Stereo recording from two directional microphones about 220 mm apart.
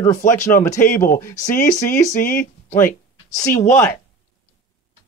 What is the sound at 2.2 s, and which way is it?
Speech, 40° left (ahead or behind).